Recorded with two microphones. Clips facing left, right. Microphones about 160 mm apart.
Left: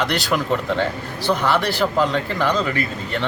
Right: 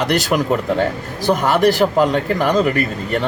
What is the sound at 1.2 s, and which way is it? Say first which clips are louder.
Speech: right 5 dB; 45° right (ahead or behind).